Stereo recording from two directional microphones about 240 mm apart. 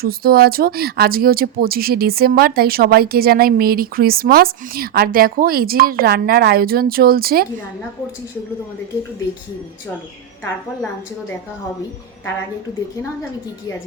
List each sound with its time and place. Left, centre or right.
0.0 s speech: right